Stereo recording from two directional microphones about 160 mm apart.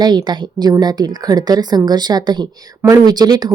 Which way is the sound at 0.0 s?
25° right (ahead or behind).